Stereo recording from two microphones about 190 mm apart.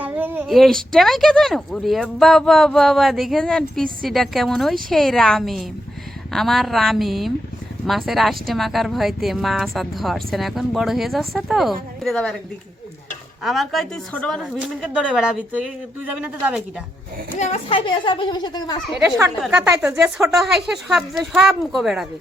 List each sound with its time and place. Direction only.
0.0 s a sound: 10° right (ahead or behind)
0.5 s speech: centre (ahead or behind)
13.4 s speech: centre (ahead or behind)
17.3 s a child's voice: 35° left (ahead or behind)
19.4 s speech: 5° right (ahead or behind)